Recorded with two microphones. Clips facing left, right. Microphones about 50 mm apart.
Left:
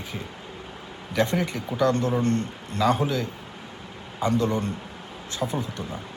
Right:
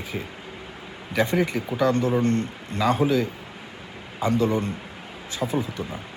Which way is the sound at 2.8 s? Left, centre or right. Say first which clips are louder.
Right 2 dB; centre.